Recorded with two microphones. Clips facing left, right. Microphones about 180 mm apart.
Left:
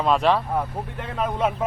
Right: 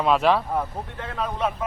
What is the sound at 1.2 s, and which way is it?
Speech, 20° left (ahead or behind).